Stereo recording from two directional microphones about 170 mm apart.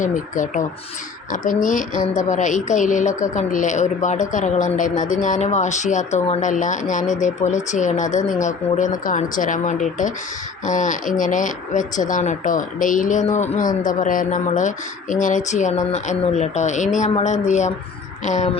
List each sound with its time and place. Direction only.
0.0 s speech: 50° left (ahead or behind)
1.6 s speech: 50° left (ahead or behind)